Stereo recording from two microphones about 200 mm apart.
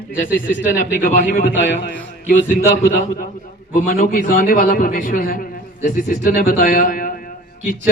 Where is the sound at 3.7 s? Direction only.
40° left (ahead or behind).